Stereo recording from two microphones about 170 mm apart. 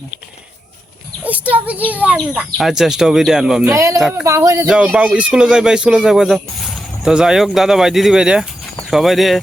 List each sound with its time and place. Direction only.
1.2 s a sound: 10° right (ahead or behind)
1.9 s speech: 10° right (ahead or behind)
3.7 s speech: 20° right (ahead or behind)
4.7 s speech: 5° right (ahead or behind)